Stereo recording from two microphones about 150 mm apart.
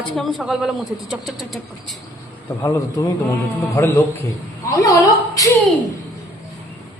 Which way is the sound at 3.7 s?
15° left (ahead or behind).